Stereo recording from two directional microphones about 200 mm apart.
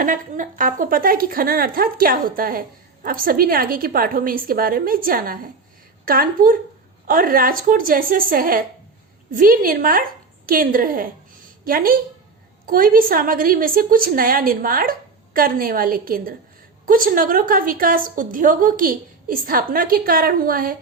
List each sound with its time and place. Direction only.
0.0 s a woman's voice: 40° right (ahead or behind)